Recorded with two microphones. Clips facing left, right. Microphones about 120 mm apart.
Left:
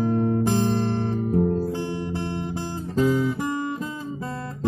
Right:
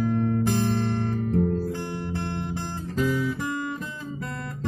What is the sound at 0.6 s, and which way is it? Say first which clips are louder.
Music: left 2 dB; 25° left (ahead or behind).